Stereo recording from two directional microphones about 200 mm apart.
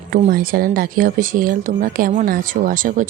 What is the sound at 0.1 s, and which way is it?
A woman's voice, 45° right (ahead or behind).